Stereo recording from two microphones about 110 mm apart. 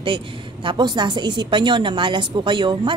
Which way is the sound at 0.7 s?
40° right (ahead or behind).